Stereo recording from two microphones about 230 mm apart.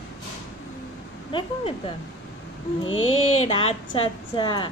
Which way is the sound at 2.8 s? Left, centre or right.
Left.